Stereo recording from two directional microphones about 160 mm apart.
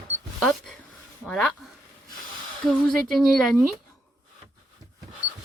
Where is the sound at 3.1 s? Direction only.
Centre (ahead or behind).